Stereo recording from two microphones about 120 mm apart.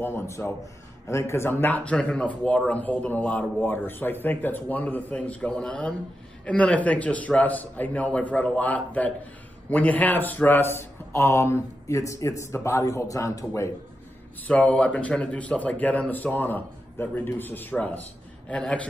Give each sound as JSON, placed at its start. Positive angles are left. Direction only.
{"t": 0.0, "sound": "a man's voice", "side_deg": 20}
{"t": 14.5, "sound": "speech", "side_deg": 10}